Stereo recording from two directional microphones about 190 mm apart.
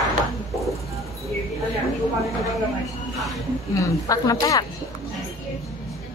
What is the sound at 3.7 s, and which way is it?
Speech, 15° left (ahead or behind).